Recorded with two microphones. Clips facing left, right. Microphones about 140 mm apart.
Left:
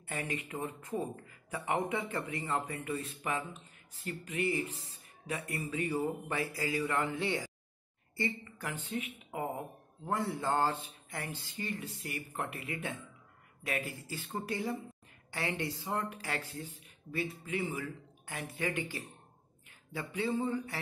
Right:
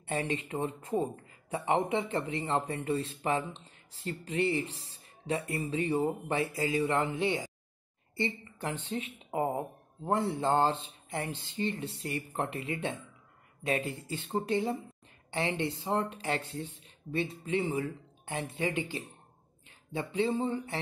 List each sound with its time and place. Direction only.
0.0 s a woman's voice: 25° right (ahead or behind)